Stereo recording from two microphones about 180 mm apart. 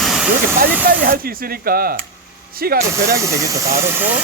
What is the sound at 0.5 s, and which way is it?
Speech, 50° right (ahead or behind).